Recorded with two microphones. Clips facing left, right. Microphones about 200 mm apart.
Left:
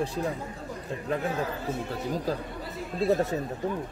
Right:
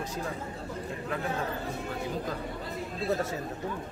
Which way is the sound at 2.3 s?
35° left (ahead or behind).